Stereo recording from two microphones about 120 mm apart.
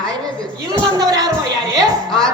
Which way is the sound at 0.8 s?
30° right (ahead or behind).